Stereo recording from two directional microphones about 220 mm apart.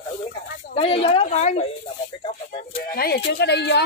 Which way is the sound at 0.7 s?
25° left (ahead or behind).